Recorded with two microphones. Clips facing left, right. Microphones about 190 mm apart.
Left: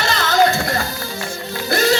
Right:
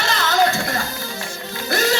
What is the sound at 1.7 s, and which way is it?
Music, 35° left (ahead or behind).